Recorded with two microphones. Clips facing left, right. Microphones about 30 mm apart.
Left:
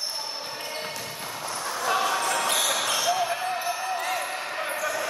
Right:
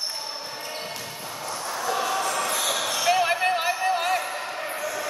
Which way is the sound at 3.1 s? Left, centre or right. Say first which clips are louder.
Right 4 dB; right.